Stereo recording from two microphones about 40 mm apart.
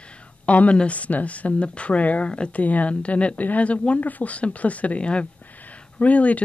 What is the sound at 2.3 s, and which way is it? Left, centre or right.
Speech, left.